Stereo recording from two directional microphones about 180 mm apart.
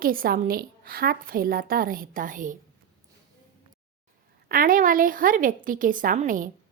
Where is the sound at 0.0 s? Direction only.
55° right (ahead or behind).